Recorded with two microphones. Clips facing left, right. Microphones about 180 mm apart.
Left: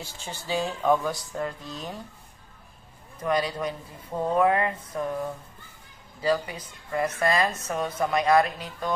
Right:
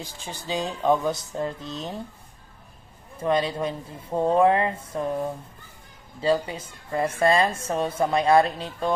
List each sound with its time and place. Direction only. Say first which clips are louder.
0.0 s speech: right 2 dB; 15° right (ahead or behind)
3.2 s speech: right 3 dB; 25° right (ahead or behind)
6.2 s speech: right 3 dB; 25° right (ahead or behind)